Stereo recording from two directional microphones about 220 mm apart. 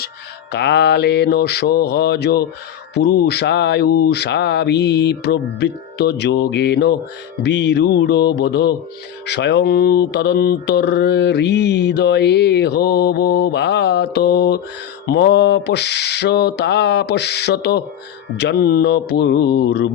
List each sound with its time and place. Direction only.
0.5 s mantra: 50° left (ahead or behind)